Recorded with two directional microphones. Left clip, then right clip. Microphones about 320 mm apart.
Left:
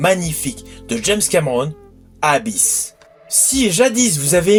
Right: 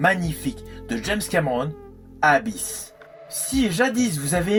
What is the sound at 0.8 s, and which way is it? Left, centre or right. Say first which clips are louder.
Speech: left 8 dB; right.